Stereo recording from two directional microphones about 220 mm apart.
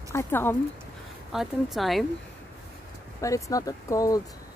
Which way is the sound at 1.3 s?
Centre (ahead or behind).